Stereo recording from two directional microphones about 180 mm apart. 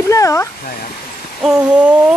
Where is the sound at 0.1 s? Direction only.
15° left (ahead or behind).